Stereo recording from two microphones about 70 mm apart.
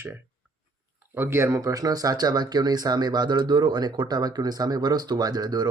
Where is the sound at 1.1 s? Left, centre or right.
Right.